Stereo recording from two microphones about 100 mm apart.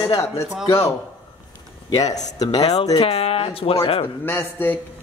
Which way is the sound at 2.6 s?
75° left (ahead or behind).